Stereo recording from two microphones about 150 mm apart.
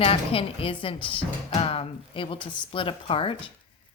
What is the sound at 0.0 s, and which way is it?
Speech, 40° left (ahead or behind).